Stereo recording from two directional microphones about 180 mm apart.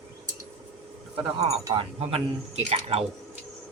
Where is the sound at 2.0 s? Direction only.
35° right (ahead or behind).